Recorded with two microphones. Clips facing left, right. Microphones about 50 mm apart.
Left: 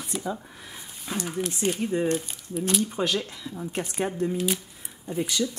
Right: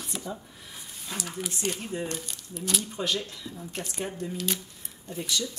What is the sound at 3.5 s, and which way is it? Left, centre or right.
Speech, left.